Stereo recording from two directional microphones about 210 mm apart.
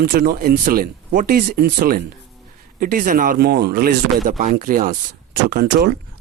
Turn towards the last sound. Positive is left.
turn(degrees=-45)  # may be behind; listen again after turning